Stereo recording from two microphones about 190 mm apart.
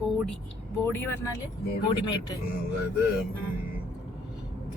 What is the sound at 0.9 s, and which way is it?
A man's voice, 10° left (ahead or behind).